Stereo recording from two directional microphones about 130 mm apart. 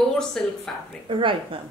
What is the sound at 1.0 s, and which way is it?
Speech, 40° right (ahead or behind).